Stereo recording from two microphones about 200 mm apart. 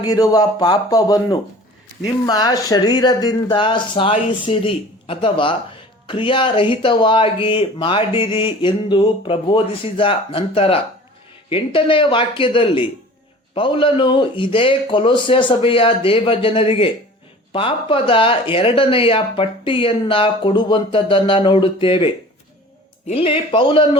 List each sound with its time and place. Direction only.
0.0 s speech: 20° left (ahead or behind)